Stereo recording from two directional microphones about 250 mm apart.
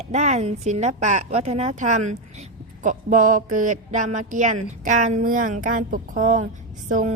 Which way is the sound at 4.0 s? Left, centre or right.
Right.